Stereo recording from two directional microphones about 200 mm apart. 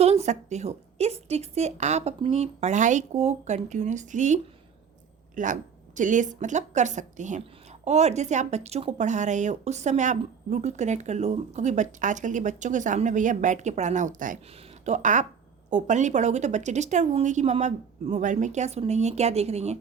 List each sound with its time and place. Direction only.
0.0 s a woman's voice: 35° right (ahead or behind)